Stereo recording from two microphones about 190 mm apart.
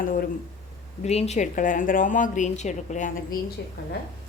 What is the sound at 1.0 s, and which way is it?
A woman's voice, 35° left (ahead or behind).